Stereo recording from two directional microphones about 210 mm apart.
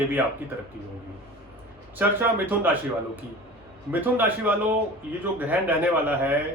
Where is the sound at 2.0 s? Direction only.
10° right (ahead or behind).